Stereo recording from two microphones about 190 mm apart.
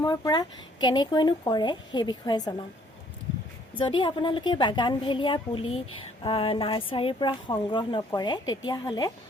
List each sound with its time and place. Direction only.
0.0 s speech: 20° left (ahead or behind)
3.8 s speech: 25° left (ahead or behind)